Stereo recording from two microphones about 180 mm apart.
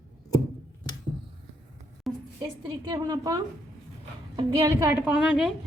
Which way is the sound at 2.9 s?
25° right (ahead or behind).